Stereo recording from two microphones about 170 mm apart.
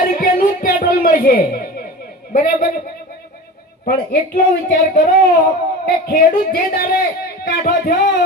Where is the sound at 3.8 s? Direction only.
65° left (ahead or behind).